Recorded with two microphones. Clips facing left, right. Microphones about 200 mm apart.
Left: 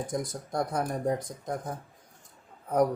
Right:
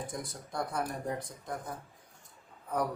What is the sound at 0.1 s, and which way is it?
Speech, 45° left (ahead or behind).